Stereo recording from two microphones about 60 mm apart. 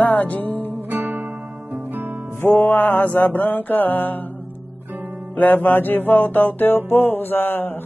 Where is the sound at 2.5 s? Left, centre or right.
Left.